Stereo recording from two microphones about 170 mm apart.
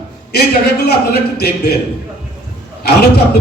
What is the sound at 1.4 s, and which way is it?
Speech, 70° left (ahead or behind).